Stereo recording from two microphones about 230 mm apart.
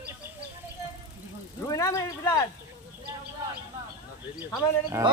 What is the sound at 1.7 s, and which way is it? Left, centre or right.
Speech, centre.